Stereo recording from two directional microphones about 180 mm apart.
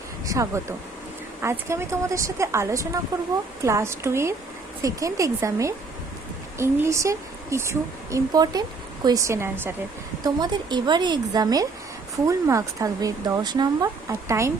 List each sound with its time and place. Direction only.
0.3 s a woman's voice: 20° right (ahead or behind)